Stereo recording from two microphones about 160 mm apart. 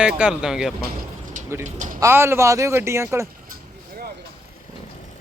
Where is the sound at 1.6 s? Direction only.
50° right (ahead or behind).